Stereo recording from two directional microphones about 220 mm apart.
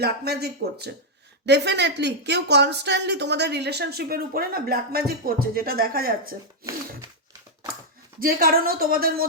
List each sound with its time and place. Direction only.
0.0 s speech: 45° right (ahead or behind)
8.2 s speech: 40° right (ahead or behind)